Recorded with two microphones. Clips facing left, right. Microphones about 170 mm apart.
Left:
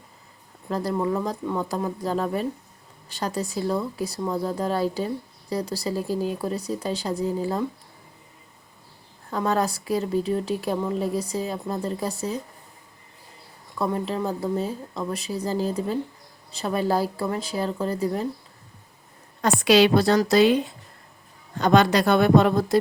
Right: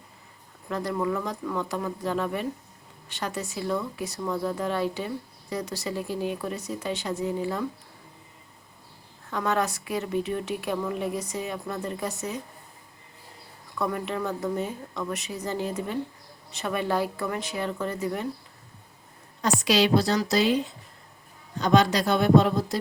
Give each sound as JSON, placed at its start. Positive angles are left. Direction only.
{"t": 0.7, "sound": "speech", "side_deg": 35}
{"t": 9.3, "sound": "speech", "side_deg": 35}
{"t": 13.7, "sound": "speech", "side_deg": 30}
{"t": 19.4, "sound": "a woman's voice", "side_deg": 55}
{"t": 21.6, "sound": "a woman's voice", "side_deg": 55}